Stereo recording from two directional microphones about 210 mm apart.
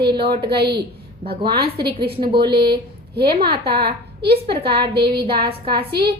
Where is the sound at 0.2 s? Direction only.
50° right (ahead or behind).